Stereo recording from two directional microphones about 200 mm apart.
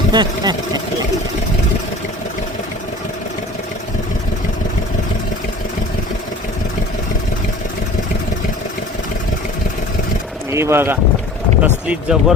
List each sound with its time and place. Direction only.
0.1 s speech: 20° right (ahead or behind)
10.5 s speech: 15° right (ahead or behind)